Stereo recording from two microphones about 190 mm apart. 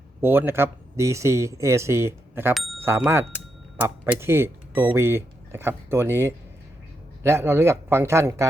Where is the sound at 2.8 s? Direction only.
10° right (ahead or behind).